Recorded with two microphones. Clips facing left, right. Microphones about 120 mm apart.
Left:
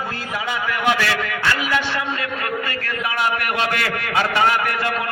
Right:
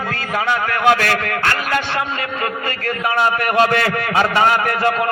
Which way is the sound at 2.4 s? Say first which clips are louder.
Right 3 dB; 40° right (ahead or behind).